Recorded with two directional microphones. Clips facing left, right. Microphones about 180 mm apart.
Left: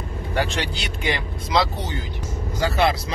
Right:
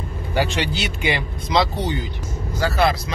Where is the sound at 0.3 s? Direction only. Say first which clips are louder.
Right 3 dB; centre (ahead or behind).